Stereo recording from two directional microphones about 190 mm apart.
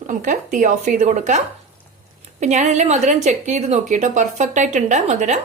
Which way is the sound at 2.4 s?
40° right (ahead or behind).